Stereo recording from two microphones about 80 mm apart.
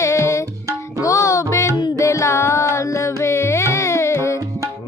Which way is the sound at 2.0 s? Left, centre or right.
Left.